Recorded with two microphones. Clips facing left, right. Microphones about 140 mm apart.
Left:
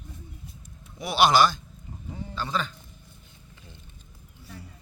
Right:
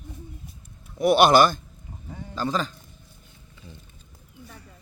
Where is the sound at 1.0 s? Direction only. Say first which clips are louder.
Right 4 dB; 55° right (ahead or behind).